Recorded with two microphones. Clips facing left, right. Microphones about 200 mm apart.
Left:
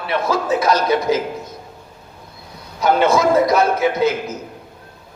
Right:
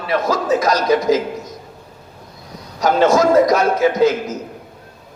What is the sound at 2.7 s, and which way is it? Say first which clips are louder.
Speech: right 2 dB; 40° right (ahead or behind).